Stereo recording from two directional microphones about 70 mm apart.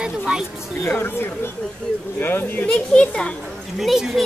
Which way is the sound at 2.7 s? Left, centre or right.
Centre.